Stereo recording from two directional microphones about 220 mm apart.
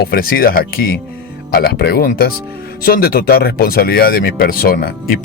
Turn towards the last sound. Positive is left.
turn(degrees=40)  # may be behind; listen again after turning